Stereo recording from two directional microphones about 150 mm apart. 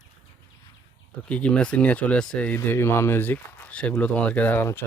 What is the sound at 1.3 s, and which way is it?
Speech, 5° left (ahead or behind).